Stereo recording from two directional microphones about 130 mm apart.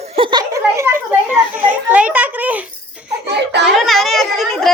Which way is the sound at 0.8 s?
15° right (ahead or behind).